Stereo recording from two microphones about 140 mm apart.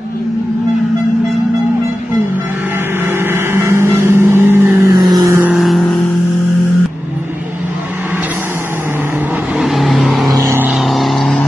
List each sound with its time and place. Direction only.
3.1 s vehicle: 15° right (ahead or behind)
5.5 s vehicle: centre (ahead or behind)
9.6 s vehicle: centre (ahead or behind)
10.2 s vehicle: 25° right (ahead or behind)
10.8 s vehicle: centre (ahead or behind)